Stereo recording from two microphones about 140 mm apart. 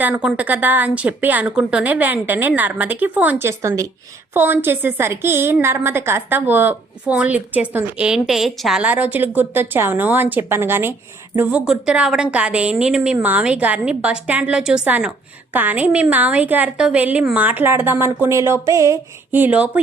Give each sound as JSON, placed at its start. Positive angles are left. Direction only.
{"t": 0.0, "sound": "speech", "side_deg": -10}